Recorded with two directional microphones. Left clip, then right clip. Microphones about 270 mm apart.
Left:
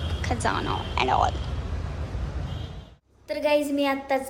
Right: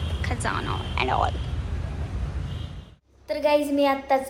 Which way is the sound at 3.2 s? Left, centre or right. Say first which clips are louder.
Right 1 dB; centre.